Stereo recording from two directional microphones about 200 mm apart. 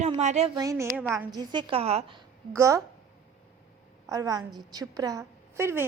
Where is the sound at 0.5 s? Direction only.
15° right (ahead or behind).